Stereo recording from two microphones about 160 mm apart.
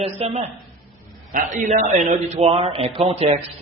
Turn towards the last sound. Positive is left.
turn(degrees=-40)  # may be behind; listen again after turning